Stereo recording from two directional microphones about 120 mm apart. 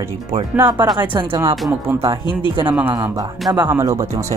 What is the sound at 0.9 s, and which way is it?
Speech, 45° right (ahead or behind).